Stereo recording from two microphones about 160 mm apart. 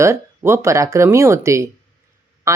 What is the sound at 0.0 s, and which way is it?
Speech, 15° right (ahead or behind).